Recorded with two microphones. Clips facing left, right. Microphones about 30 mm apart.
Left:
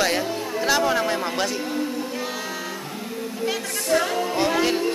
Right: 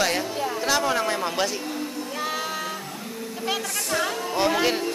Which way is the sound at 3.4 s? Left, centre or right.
Centre.